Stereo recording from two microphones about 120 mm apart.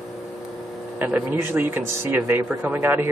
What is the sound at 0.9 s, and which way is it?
Speech, 15° right (ahead or behind).